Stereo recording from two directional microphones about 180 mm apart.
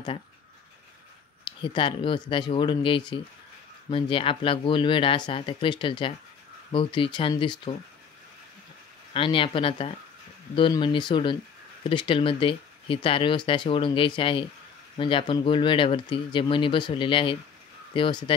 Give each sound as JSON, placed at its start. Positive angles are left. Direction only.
{"t": 1.4, "sound": "speech", "side_deg": 25}
{"t": 9.1, "sound": "speech", "side_deg": 30}